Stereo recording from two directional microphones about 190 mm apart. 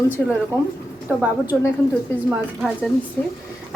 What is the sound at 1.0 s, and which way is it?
A woman's voice, 10° right (ahead or behind).